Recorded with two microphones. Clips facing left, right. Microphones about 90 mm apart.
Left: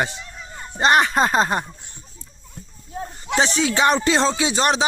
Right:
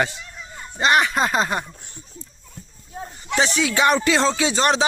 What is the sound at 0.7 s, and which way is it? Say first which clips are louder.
Speech: left 2 dB; 35° left (ahead or behind).